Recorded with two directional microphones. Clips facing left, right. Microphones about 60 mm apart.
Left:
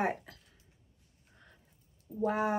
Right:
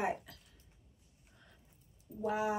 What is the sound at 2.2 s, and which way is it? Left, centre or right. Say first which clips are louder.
Speech: left 4 dB; left.